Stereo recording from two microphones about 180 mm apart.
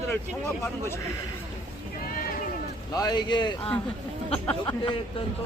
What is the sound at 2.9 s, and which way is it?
Speech, 20° left (ahead or behind).